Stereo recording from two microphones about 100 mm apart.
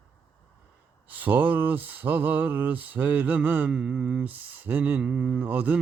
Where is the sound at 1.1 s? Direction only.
20° right (ahead or behind).